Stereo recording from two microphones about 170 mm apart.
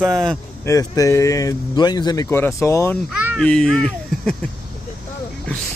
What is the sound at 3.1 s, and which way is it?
Babbling, 10° right (ahead or behind).